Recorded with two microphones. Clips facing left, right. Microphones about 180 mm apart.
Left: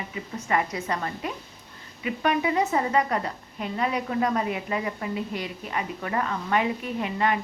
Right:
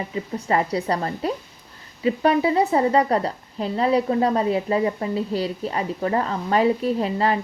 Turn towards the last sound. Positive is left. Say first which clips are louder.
# right 5 dB
turn(degrees=-35)  # may be behind; listen again after turning